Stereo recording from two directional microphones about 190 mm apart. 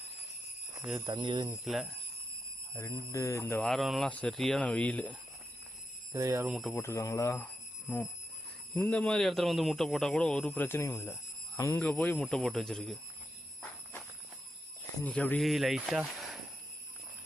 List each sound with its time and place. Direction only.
0.9 s speech: 20° right (ahead or behind)
1.5 s a man's voice: centre (ahead or behind)
3.1 s speech: 15° left (ahead or behind)
3.6 s a man's voice: centre (ahead or behind)
6.1 s speech: 15° right (ahead or behind)
6.6 s speech: 10° left (ahead or behind)
8.7 s a man's voice: 10° left (ahead or behind)
15.0 s a man's voice: 5° left (ahead or behind)